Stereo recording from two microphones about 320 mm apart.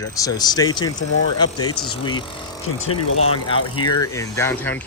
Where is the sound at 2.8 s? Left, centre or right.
Left.